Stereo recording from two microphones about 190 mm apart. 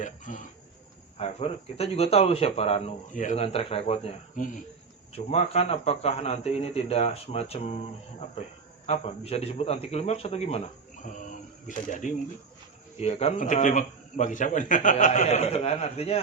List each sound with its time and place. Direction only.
0.0 s speech: 45° left (ahead or behind)
1.2 s speech: 30° left (ahead or behind)
8.9 s speech: 35° left (ahead or behind)
11.7 s speech: 40° left (ahead or behind)